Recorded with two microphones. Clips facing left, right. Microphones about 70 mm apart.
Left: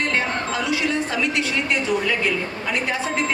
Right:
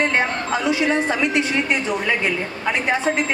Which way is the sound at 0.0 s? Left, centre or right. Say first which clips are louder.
Right 3 dB; right.